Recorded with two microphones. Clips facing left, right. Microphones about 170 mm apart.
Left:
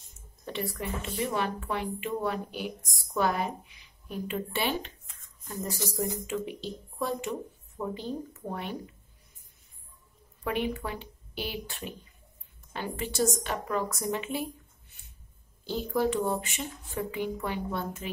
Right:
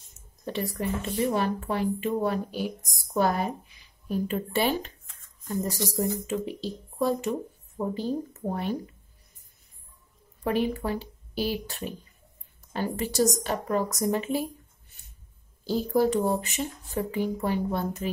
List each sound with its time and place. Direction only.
0.5 s speech: 40° right (ahead or behind)
10.4 s speech: 35° right (ahead or behind)
15.6 s speech: 40° right (ahead or behind)